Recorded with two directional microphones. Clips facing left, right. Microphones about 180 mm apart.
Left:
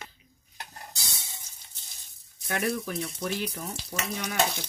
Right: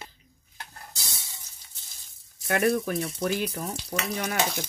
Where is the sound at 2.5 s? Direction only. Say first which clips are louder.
Right 6 dB; 55° right (ahead or behind).